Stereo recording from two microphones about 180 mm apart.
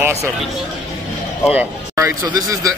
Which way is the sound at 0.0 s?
15° right (ahead or behind).